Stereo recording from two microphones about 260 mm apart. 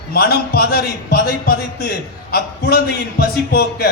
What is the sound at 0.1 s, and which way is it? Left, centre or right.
A man's voice, left.